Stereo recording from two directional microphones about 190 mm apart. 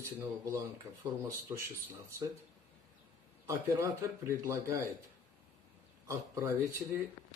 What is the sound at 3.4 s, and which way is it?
Speech, 15° right (ahead or behind).